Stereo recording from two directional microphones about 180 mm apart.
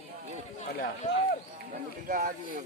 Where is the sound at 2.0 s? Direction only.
50° right (ahead or behind).